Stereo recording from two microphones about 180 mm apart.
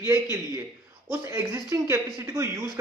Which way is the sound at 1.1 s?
15° right (ahead or behind).